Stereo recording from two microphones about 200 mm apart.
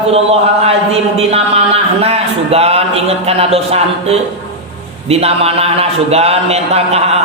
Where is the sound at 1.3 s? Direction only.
30° right (ahead or behind).